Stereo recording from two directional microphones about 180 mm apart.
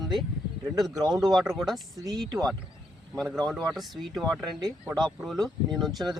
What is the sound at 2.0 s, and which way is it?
Speech, 20° right (ahead or behind).